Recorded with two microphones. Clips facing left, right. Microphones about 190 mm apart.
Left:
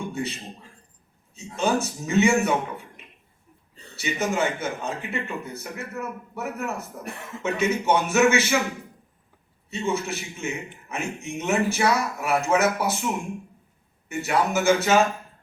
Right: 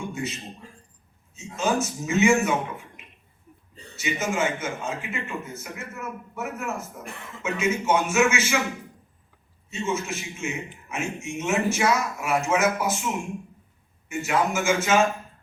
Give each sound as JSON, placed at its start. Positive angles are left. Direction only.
{"t": 0.1, "sound": "a man's voice", "side_deg": 35}
{"t": 1.4, "sound": "a man's voice", "side_deg": 35}
{"t": 3.9, "sound": "a man's voice", "side_deg": 35}
{"t": 9.6, "sound": "a man's voice", "side_deg": 35}
{"t": 14.1, "sound": "a man's voice", "side_deg": 35}